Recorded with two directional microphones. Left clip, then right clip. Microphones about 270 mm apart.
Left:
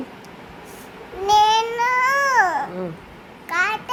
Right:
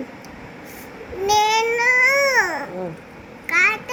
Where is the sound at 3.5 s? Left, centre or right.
Centre.